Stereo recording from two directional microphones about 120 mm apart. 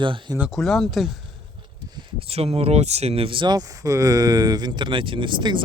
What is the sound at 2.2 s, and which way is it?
Speech, 55° right (ahead or behind).